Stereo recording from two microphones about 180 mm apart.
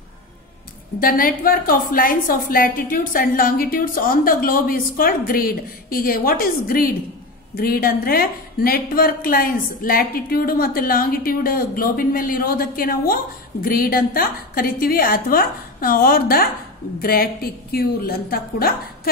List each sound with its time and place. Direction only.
1.0 s a woman's voice: 50° left (ahead or behind)